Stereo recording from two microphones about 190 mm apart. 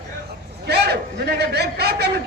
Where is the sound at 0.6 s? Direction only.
60° right (ahead or behind).